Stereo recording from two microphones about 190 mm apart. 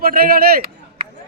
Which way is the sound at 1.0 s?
50° right (ahead or behind).